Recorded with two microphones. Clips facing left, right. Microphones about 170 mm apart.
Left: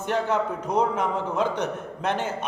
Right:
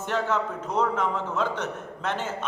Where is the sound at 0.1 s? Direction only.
15° left (ahead or behind).